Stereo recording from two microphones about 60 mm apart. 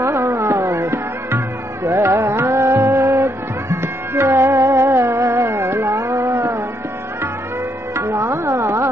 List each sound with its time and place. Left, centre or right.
0.0 s music: right
7.9 s music: right